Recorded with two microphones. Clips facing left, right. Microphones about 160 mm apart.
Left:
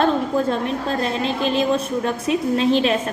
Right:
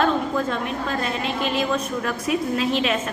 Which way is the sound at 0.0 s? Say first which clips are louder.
Left 3 dB; 35° left (ahead or behind).